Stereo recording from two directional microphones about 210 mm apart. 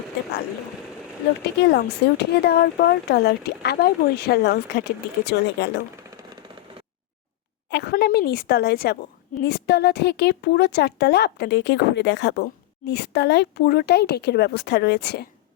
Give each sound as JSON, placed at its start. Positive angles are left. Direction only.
{"t": 1.7, "sound": "a woman's voice", "side_deg": 50}
{"t": 7.7, "sound": "a sound", "side_deg": 50}
{"t": 9.4, "sound": "a woman's voice", "side_deg": 50}